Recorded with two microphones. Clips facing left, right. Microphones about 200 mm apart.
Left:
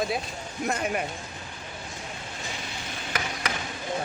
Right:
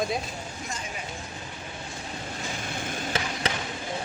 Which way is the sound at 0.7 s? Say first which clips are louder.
Left 12 dB; 60° left (ahead or behind).